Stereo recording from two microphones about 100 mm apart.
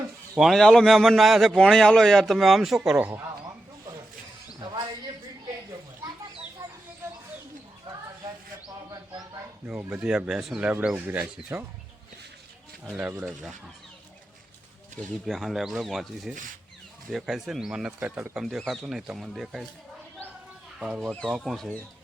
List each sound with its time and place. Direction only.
0.3 s a man's voice: centre (ahead or behind)
6.6 s a sound: 30° right (ahead or behind)
9.6 s speech: 10° right (ahead or behind)
12.8 s speech: 5° right (ahead or behind)
15.3 s a man's voice: centre (ahead or behind)
18.3 s a man's voice: centre (ahead or behind)
20.7 s speech: 10° right (ahead or behind)
21.2 s a man's voice: centre (ahead or behind)